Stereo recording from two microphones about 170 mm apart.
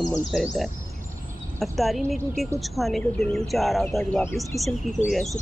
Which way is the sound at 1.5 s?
Centre (ahead or behind).